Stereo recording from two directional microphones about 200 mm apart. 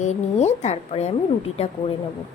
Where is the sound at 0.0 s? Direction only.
35° left (ahead or behind).